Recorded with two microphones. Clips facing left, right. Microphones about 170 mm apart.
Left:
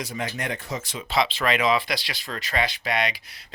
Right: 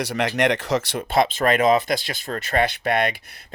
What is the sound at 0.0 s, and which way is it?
Speech, 80° right.